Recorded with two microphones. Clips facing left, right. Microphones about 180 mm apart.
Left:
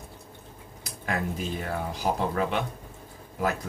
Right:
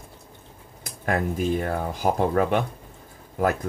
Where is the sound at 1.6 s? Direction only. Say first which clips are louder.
Right 4 dB; 50° right (ahead or behind).